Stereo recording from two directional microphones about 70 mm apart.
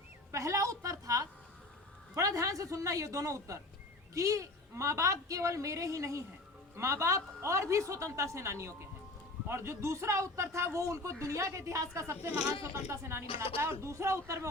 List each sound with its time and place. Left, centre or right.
0.3 s speech: right
13.1 s speech: right